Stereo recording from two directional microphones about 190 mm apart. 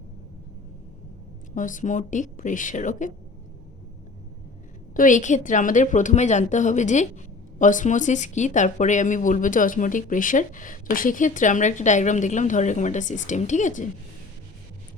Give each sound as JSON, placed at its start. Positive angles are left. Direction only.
{"t": 1.5, "sound": "speech", "side_deg": 45}
{"t": 4.9, "sound": "speech", "side_deg": 40}